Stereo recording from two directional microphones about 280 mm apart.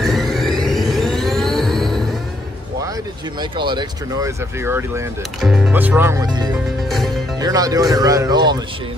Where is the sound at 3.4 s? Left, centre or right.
Centre.